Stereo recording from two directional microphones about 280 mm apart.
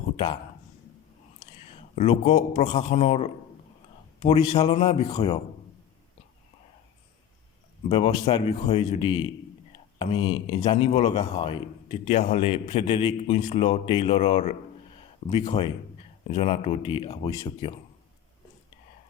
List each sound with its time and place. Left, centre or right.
2.0 s a man's voice: left
7.9 s a man's voice: centre